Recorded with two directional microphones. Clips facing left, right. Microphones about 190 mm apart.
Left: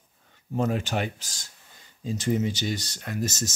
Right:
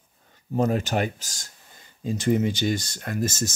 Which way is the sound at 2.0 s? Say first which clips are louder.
Right 3 dB; 55° right (ahead or behind).